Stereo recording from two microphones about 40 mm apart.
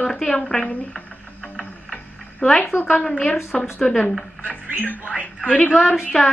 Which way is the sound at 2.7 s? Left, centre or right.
Left.